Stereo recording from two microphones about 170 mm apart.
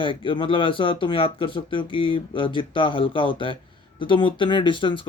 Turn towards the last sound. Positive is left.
turn(degrees=30)  # may be behind; listen again after turning